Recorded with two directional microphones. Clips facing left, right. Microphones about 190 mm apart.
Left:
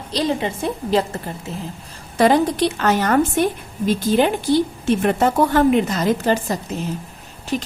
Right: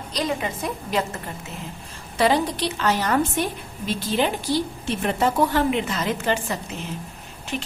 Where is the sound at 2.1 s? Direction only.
50° left (ahead or behind).